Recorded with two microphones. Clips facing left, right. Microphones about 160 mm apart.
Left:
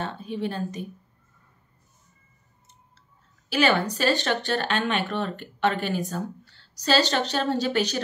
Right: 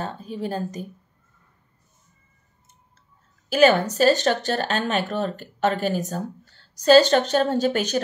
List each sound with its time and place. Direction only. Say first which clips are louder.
0.0 s a woman's voice: even; 40° right (ahead or behind)
3.4 s speech: right 5 dB; 40° right (ahead or behind)